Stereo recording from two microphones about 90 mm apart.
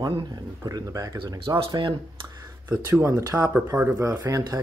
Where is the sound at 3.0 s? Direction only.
35° right (ahead or behind).